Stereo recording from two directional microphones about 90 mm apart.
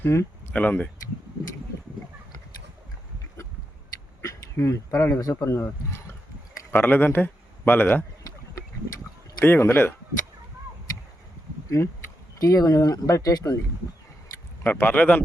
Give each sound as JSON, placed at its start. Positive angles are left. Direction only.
{"t": 0.0, "sound": "a sound", "side_deg": 25}
{"t": 0.5, "sound": "speech", "side_deg": 15}
{"t": 4.2, "sound": "a man's voice", "side_deg": 35}
{"t": 9.4, "sound": "speech", "side_deg": 25}
{"t": 11.8, "sound": "speech", "side_deg": 30}
{"t": 12.4, "sound": "speech", "side_deg": 40}
{"t": 14.6, "sound": "speech", "side_deg": 20}